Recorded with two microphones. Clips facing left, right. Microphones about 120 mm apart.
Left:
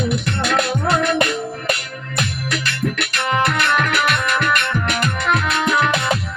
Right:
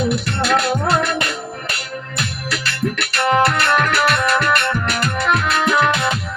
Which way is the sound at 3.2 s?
40° right (ahead or behind).